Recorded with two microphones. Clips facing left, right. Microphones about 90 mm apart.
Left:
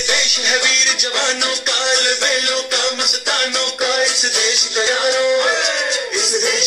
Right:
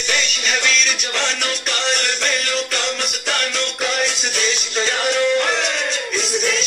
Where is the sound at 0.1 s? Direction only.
15° left (ahead or behind).